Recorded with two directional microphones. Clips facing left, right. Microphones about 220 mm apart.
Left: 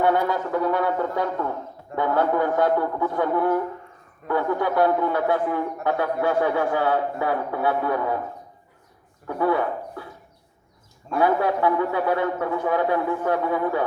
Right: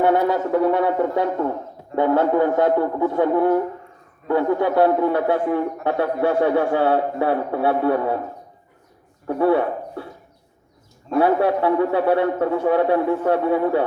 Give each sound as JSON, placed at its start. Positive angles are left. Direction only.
{"t": 0.0, "sound": "a man's voice", "side_deg": -25}
{"t": 9.2, "sound": "speech", "side_deg": -30}
{"t": 11.2, "sound": "a man's voice", "side_deg": -30}